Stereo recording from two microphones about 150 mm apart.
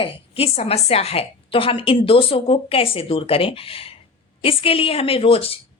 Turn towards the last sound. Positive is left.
turn(degrees=40)  # may be behind; listen again after turning